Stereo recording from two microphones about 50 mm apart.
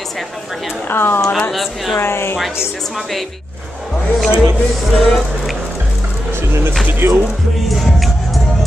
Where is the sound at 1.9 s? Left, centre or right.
Left.